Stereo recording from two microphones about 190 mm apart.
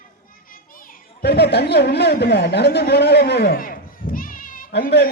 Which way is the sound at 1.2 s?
60° left (ahead or behind).